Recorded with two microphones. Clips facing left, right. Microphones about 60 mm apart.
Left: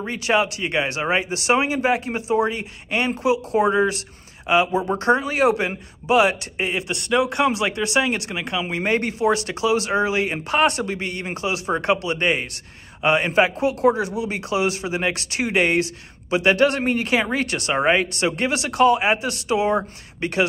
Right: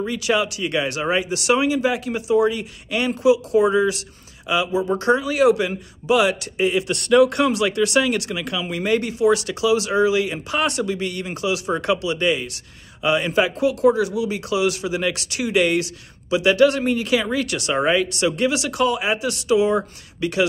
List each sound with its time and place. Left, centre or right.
0.0 s speech: left
6.9 s speech: centre; by 20.4 s left